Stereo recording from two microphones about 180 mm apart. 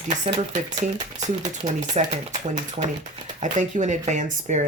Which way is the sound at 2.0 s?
35° right (ahead or behind).